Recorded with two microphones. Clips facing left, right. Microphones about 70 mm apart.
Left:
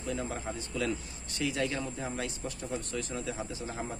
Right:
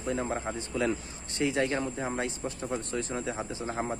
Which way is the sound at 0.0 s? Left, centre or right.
Right.